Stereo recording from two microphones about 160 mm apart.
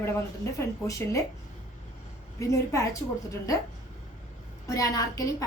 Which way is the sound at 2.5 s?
20° left (ahead or behind).